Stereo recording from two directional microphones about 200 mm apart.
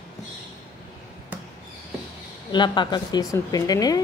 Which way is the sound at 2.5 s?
20° left (ahead or behind).